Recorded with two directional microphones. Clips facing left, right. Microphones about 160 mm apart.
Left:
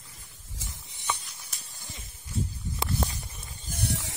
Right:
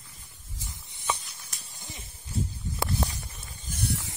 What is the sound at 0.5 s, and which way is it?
Snake, 80° left.